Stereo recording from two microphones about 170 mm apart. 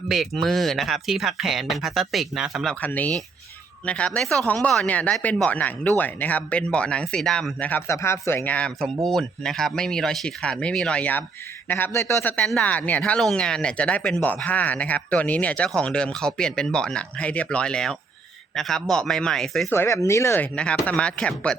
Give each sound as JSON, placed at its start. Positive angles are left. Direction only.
{"t": 0.1, "sound": "speech", "side_deg": 0}
{"t": 2.8, "sound": "speech", "side_deg": 10}
{"t": 19.7, "sound": "speech", "side_deg": 15}